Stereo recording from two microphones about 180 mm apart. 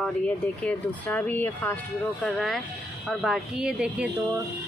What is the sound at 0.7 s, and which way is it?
Speech, 10° left (ahead or behind).